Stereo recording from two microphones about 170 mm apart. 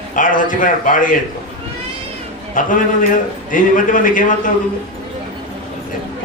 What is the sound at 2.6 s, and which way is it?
A man's voice, 50° left (ahead or behind).